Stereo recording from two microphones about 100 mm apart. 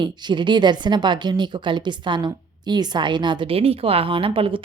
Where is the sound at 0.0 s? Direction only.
50° right (ahead or behind).